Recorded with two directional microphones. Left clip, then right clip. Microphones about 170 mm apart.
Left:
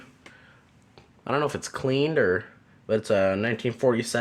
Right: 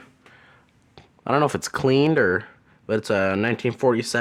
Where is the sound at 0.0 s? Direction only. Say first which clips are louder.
Even; 35° right (ahead or behind).